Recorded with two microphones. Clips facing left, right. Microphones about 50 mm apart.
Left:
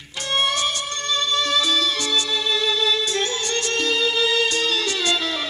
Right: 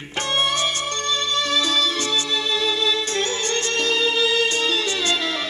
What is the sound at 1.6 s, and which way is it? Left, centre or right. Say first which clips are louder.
Music: even; right.